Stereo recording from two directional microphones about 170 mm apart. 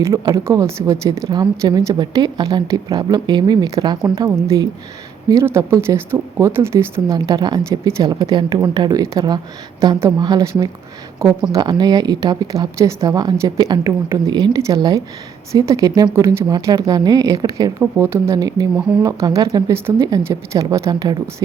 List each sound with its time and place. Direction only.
0.0 s speech: 15° right (ahead or behind)